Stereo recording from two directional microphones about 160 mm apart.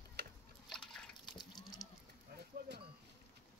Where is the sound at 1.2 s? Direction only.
25° left (ahead or behind).